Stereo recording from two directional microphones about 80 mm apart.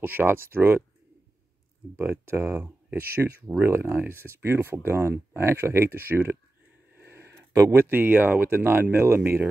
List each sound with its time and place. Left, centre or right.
0.0 s speech: right
2.0 s speech: right
7.0 s a sound: right
7.5 s speech: right
7.9 s speech: right